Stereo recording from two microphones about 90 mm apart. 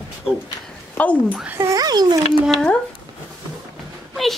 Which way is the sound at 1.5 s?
40° right (ahead or behind).